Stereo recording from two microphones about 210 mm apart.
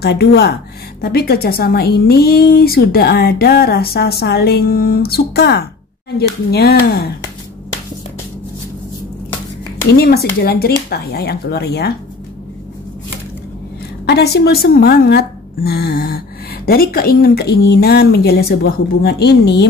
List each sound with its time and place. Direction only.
0.0 s a woman's voice: 50° left (ahead or behind)
9.8 s a woman's voice: 50° left (ahead or behind)
14.0 s a woman's voice: 50° left (ahead or behind)